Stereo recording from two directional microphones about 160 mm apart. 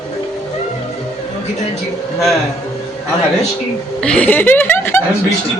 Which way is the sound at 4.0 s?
5° left (ahead or behind).